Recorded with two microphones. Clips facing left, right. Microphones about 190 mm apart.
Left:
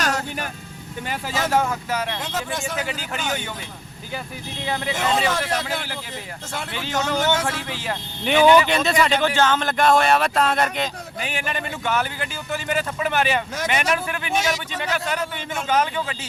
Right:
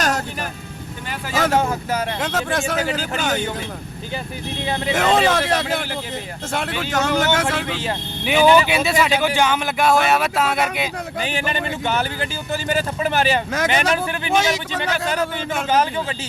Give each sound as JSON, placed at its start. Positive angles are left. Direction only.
{"t": 0.0, "sound": "vehicle", "side_deg": -45}
{"t": 1.5, "sound": "a man's voice", "side_deg": -30}
{"t": 2.2, "sound": "speech", "side_deg": -80}
{"t": 4.9, "sound": "a man's voice", "side_deg": -85}
{"t": 8.2, "sound": "speech", "side_deg": -5}
{"t": 11.2, "sound": "a man's voice", "side_deg": -30}